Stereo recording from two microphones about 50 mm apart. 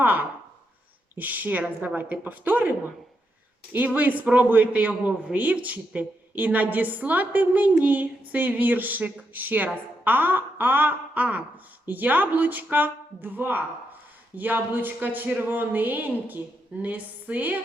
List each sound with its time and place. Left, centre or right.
0.0 s a man's voice: right